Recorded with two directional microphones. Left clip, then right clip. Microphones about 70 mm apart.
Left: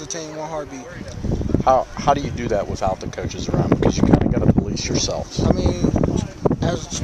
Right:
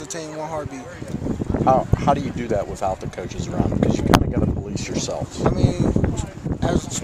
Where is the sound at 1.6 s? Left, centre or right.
Left.